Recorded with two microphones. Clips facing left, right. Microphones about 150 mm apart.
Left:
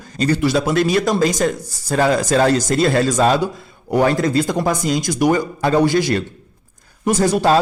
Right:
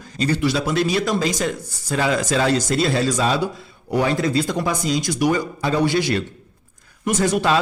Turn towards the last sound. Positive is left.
turn(degrees=40)  # may be behind; listen again after turning